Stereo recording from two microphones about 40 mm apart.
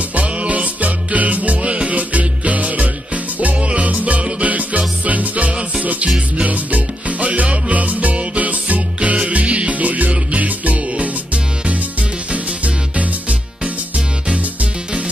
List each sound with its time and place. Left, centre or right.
0.1 s music: right
12.3 s music: right